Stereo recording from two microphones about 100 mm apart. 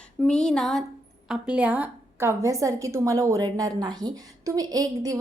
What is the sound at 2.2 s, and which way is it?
A woman's voice, 30° right (ahead or behind).